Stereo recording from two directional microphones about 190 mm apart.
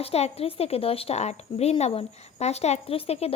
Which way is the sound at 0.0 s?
30° left (ahead or behind).